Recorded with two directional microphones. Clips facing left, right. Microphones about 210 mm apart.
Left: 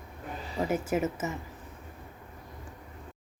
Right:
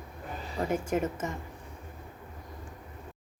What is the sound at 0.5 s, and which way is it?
Speech, 5° left (ahead or behind).